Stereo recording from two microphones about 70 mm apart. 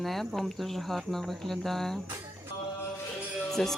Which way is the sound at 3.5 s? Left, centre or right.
Centre.